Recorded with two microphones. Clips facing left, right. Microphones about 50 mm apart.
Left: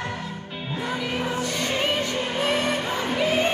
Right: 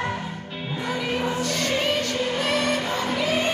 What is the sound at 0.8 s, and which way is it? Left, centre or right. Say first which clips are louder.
Music: right 2 dB; centre.